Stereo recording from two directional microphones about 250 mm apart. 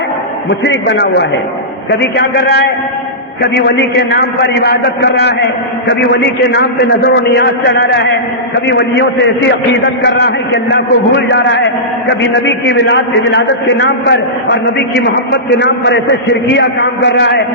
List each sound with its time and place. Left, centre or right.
0.6 s a man's voice: left
3.7 s a man's voice: left
10.0 s a man's voice: left